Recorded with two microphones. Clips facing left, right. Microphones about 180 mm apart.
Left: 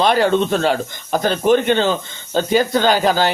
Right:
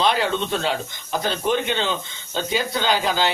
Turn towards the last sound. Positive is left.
turn(degrees=50)  # may be behind; listen again after turning